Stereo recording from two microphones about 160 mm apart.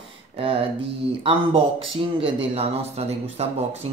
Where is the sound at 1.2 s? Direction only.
35° right (ahead or behind).